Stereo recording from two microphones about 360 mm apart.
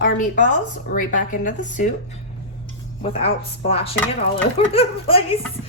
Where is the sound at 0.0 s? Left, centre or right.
Left.